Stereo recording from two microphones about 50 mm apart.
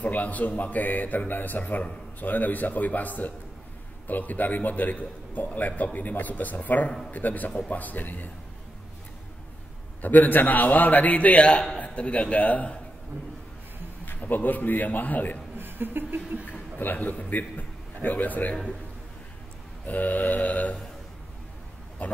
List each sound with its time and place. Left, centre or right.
0.0 s a man's voice: left
10.0 s a man's voice: left
14.0 s a man's voice: left
15.5 s a sound: right
16.7 s a man's voice: left
19.9 s a man's voice: left
22.0 s speech: left